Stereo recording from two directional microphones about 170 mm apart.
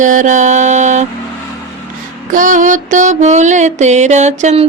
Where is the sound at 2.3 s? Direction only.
50° right (ahead or behind).